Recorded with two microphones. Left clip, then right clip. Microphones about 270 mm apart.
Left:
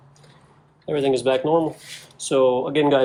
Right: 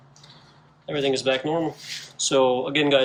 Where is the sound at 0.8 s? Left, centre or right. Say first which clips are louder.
Left 3 dB; centre.